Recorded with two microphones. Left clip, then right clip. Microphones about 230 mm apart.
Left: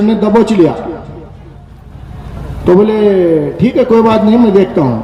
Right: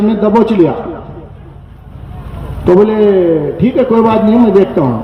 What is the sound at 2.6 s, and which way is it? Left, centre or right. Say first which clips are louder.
A man's voice: even; left.